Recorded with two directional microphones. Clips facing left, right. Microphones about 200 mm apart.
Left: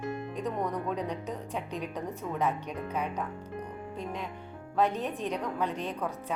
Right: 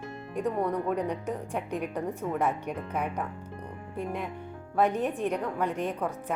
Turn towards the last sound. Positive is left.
turn(degrees=-15)  # may be behind; listen again after turning